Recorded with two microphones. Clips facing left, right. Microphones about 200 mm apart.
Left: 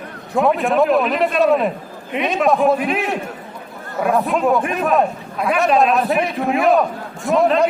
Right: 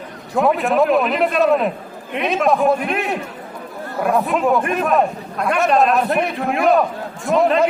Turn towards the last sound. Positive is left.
turn(degrees=0)  # may be behind; listen again after turning